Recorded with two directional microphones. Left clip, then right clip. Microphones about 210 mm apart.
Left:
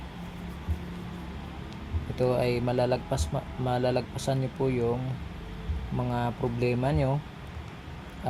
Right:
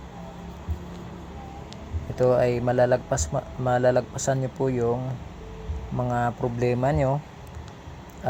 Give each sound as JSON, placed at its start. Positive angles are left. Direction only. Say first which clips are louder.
{"t": 2.1, "sound": "speech", "louder": "right 6 dB", "side_deg": -15}
{"t": 6.1, "sound": "speech", "louder": "right 5 dB", "side_deg": -15}